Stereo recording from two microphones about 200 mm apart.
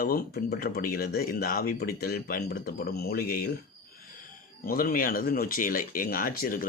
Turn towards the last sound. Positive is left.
turn(degrees=45)  # may be behind; listen again after turning